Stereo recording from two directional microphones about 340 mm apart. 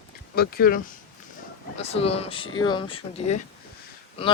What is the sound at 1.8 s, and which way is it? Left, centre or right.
Speech, centre.